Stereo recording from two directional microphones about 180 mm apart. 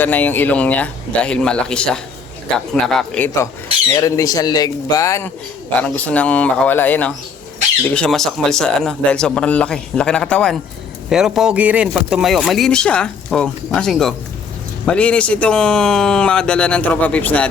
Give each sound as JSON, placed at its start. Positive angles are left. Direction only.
{"t": 0.0, "sound": "speech", "side_deg": 10}
{"t": 3.2, "sound": "speech", "side_deg": 15}